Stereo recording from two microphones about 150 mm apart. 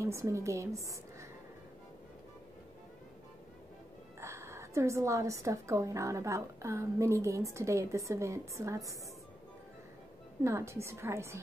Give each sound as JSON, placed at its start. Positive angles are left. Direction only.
{"t": 0.0, "sound": "a woman's voice", "side_deg": -20}
{"t": 4.2, "sound": "a woman's voice", "side_deg": -20}
{"t": 10.4, "sound": "a woman's voice", "side_deg": -20}